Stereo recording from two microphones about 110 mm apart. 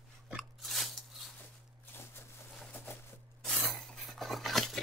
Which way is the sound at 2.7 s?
15° left (ahead or behind).